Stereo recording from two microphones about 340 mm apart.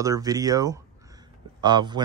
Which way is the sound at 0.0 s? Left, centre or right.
Centre.